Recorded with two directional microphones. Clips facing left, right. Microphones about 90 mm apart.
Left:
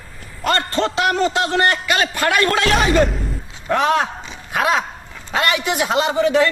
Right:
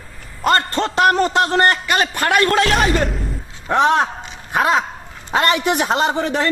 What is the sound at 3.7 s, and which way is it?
Speech, 30° right (ahead or behind).